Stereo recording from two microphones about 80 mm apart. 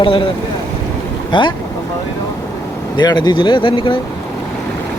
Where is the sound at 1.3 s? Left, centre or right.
Left.